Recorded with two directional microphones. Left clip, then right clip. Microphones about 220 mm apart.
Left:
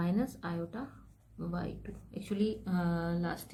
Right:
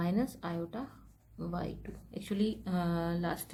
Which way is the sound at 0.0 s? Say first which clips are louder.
Right 1 dB; 20° right (ahead or behind).